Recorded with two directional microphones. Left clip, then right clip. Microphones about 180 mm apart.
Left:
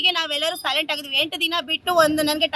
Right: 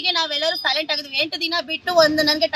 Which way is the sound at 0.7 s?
35° left (ahead or behind).